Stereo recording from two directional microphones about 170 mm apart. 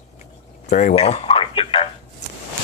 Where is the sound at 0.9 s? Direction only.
35° left (ahead or behind).